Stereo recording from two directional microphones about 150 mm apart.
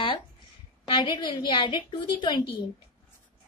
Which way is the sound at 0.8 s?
30° left (ahead or behind).